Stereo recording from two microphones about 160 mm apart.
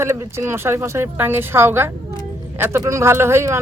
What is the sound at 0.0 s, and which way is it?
Speech, 15° right (ahead or behind).